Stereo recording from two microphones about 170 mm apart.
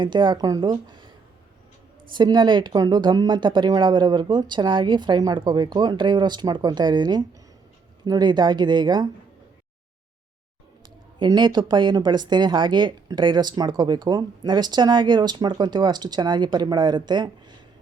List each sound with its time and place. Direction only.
0.0 s speech: 25° right (ahead or behind)
2.1 s speech: 25° right (ahead or behind)
11.2 s speech: 25° right (ahead or behind)